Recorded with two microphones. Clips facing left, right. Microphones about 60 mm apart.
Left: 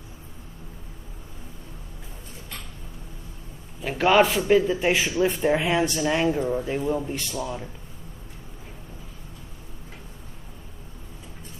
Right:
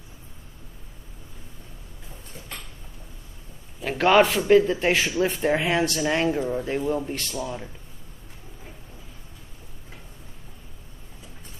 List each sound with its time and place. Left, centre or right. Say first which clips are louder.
3.8 s a man's voice: right 1 dB; centre
5.2 s a man's voice: left 3 dB; centre
7.2 s speech: left 1 dB; centre